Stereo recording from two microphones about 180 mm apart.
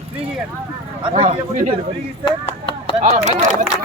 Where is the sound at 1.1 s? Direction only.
40° right (ahead or behind).